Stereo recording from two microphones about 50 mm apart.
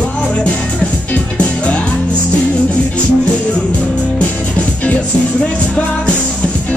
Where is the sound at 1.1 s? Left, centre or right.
Left.